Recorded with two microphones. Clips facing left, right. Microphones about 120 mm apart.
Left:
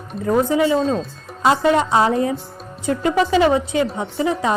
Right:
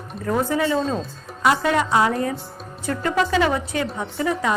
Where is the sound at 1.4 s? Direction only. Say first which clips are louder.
Left 3 dB; 25° left (ahead or behind).